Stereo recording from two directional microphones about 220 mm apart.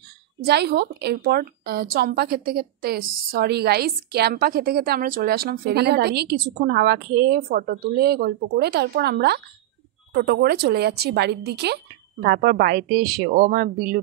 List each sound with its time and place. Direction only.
0.5 s a woman's voice: 50° right (ahead or behind)